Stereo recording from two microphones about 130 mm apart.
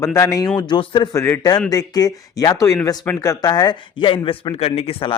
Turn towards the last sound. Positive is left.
turn(degrees=45)  # may be behind; listen again after turning